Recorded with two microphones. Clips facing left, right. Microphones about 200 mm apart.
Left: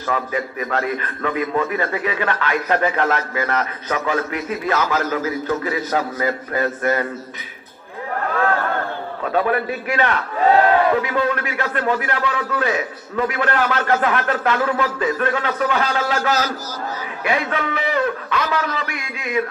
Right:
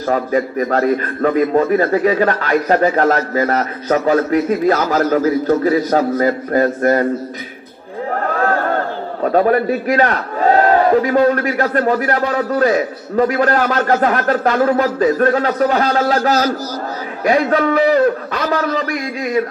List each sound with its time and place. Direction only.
0.0 s a man's voice: 40° right (ahead or behind)
8.4 s chatter: 40° right (ahead or behind)
9.2 s a man's voice: 40° right (ahead or behind)